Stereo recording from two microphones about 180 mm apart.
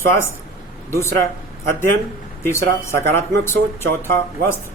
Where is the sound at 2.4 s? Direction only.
15° left (ahead or behind).